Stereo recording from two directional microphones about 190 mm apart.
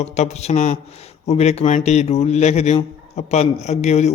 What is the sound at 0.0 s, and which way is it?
A man's voice, 35° left (ahead or behind).